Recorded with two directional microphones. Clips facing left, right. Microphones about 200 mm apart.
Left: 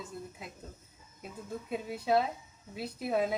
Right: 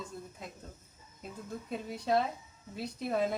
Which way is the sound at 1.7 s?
5° left (ahead or behind).